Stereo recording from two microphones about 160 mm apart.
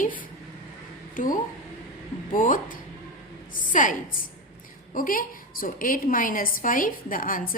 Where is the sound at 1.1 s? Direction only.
55° left (ahead or behind).